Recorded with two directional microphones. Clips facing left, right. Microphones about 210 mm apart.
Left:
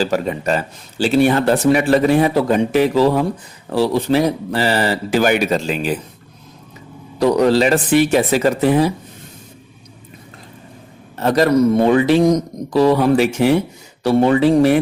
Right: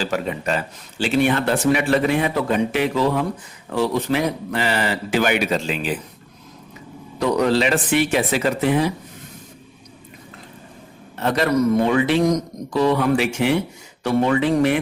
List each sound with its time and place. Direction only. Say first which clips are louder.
0.0 s speech: left 5 dB; 40° left (ahead or behind)
7.2 s speech: left 5 dB; 35° left (ahead or behind)
11.2 s speech: left 5 dB; 40° left (ahead or behind)